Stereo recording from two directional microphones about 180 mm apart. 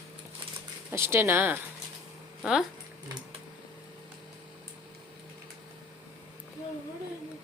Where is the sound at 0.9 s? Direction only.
15° right (ahead or behind).